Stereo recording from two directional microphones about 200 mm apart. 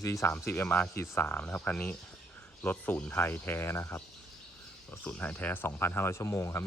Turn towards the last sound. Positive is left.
turn(degrees=15)  # may be behind; listen again after turning